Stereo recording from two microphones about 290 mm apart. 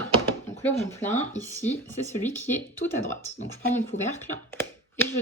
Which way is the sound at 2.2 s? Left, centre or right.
Centre.